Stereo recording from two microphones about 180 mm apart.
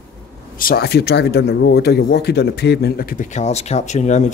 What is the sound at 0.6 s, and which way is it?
Speech, 55° left (ahead or behind).